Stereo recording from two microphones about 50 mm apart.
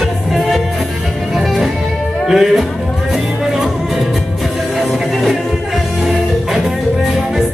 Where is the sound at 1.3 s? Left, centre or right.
Centre.